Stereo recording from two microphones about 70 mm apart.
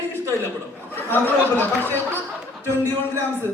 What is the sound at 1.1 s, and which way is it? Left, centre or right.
A man's voice, left.